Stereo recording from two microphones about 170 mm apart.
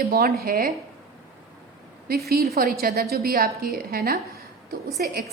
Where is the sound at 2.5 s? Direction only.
60° right (ahead or behind).